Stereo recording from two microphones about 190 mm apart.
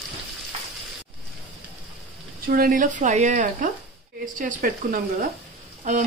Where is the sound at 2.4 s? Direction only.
50° right (ahead or behind).